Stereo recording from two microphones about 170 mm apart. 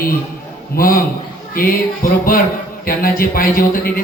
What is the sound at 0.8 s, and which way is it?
A man's voice, 60° left (ahead or behind).